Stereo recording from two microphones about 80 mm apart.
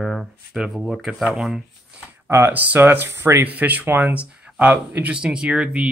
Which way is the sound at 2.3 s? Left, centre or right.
Right.